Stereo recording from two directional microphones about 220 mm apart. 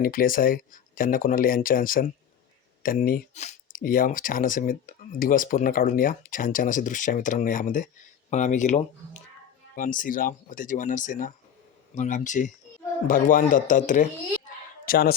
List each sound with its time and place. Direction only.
0.0 s speech: 40° left (ahead or behind)